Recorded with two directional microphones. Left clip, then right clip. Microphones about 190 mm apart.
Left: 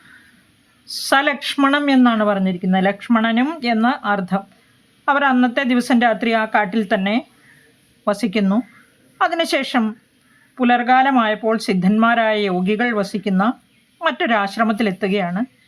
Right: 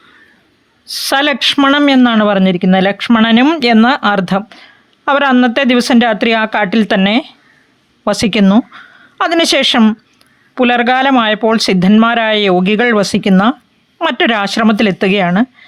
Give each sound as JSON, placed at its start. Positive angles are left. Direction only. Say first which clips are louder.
{"t": 0.9, "sound": "speech", "louder": "right 4 dB", "side_deg": -40}